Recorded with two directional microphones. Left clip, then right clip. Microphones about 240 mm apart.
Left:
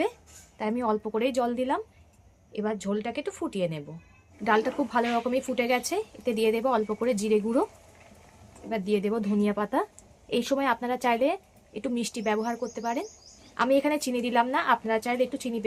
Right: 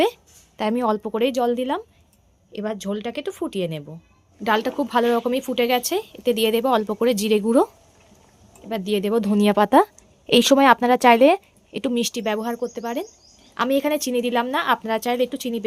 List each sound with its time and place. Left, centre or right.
0.0 s a woman's voice: right
8.7 s a woman's voice: right